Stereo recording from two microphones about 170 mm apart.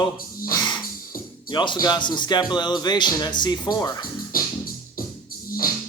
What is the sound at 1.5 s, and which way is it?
A man's voice, 25° left (ahead or behind).